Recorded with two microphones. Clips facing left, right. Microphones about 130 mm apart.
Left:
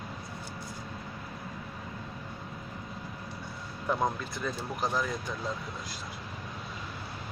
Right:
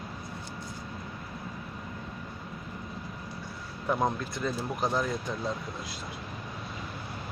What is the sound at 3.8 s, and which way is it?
Speech, 5° right (ahead or behind).